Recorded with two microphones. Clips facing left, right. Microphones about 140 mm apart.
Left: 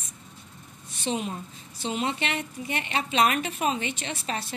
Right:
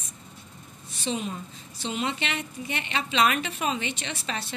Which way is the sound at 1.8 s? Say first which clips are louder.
Left 1 dB; 40° left (ahead or behind).